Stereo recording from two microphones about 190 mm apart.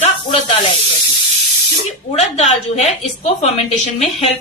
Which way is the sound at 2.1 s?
35° left (ahead or behind).